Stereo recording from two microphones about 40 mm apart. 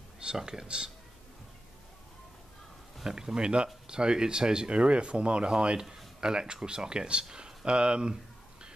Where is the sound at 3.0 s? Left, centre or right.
Centre; by 5.5 s right.